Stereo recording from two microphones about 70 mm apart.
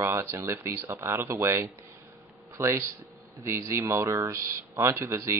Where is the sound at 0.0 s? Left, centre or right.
Right.